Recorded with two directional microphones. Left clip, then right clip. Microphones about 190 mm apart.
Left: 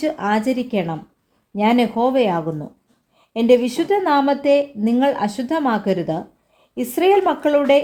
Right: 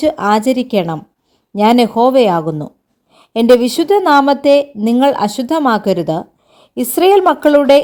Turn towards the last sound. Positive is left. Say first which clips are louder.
# right 7 dB
turn(degrees=-40)  # may be behind; listen again after turning